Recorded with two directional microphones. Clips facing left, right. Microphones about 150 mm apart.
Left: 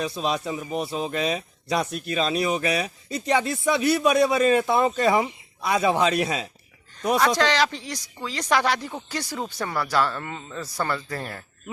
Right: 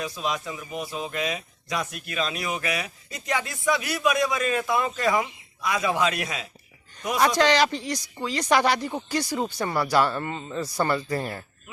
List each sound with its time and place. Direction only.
0.2 s speech: 30° left (ahead or behind)
7.2 s speech: 10° right (ahead or behind)